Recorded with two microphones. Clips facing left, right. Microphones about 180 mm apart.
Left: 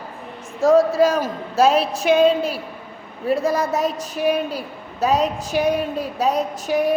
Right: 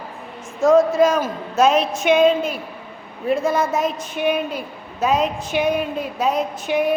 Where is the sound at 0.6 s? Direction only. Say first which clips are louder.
Right 1 dB; 35° left (ahead or behind).